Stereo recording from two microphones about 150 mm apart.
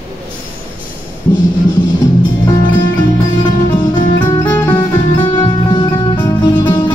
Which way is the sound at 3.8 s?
30° left (ahead or behind).